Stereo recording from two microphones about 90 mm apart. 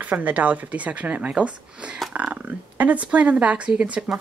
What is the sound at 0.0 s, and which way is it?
Speech, 15° right (ahead or behind).